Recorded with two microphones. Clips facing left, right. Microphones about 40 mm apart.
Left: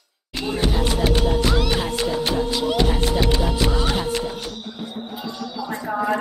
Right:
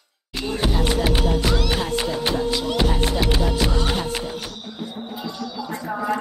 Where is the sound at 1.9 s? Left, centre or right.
Centre.